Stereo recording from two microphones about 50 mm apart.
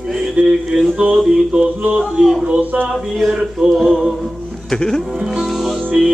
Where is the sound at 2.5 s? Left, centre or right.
Right.